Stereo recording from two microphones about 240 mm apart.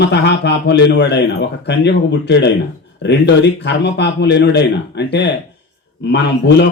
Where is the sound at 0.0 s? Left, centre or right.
Left.